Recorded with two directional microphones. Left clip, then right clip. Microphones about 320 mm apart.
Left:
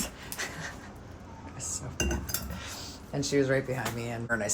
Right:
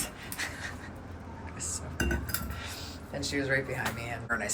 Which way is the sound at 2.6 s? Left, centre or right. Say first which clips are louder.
Even; left.